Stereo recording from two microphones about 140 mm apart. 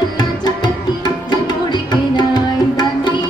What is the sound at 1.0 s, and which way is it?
Music, 30° left (ahead or behind).